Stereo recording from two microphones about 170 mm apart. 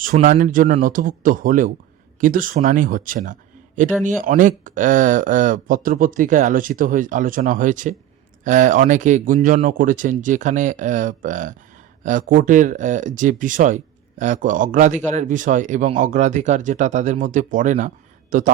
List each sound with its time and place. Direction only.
0.0 s speech: 55° right (ahead or behind)